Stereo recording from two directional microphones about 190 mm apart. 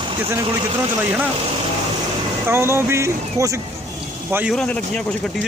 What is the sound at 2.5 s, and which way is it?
Speech, 15° right (ahead or behind).